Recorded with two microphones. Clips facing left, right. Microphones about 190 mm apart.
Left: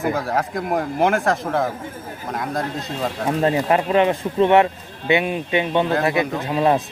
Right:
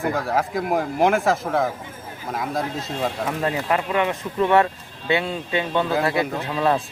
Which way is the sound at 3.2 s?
30° left (ahead or behind).